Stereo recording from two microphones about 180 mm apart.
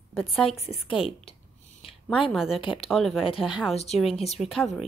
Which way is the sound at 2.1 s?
Centre (ahead or behind).